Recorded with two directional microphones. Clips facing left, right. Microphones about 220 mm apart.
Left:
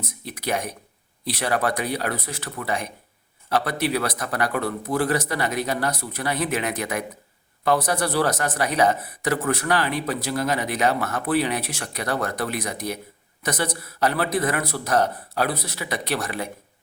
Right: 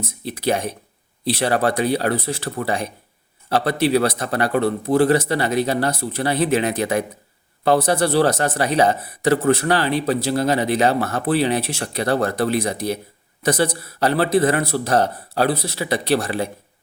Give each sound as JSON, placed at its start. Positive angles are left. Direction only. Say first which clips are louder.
{"t": 0.0, "sound": "speech", "louder": "right 7 dB", "side_deg": -30}